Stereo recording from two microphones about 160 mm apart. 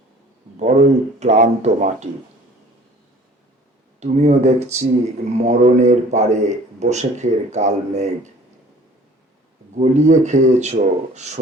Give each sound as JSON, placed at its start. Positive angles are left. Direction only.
{"t": 0.6, "sound": "speech", "side_deg": -45}
{"t": 4.0, "sound": "speech", "side_deg": -45}
{"t": 9.8, "sound": "speech", "side_deg": -45}